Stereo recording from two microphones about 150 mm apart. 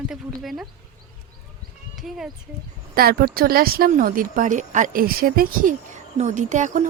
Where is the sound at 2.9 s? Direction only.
90° right.